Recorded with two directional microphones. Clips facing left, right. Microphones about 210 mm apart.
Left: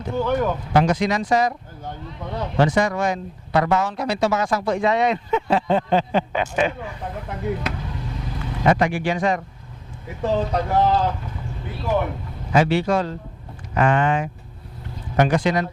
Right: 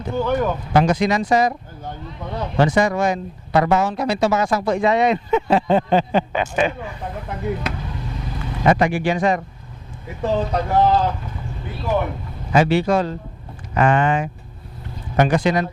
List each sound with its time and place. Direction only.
0.3 s speech: 20° right (ahead or behind)
2.2 s speech: 25° right (ahead or behind)
2.6 s speech: 10° right (ahead or behind)
10.2 s speech: 20° right (ahead or behind)